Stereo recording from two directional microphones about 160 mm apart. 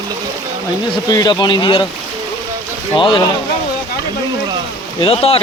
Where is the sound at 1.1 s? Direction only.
25° left (ahead or behind).